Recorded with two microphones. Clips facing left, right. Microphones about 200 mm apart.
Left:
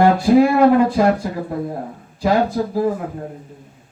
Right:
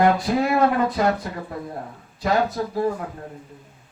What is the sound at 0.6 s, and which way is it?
Speech, 30° left (ahead or behind).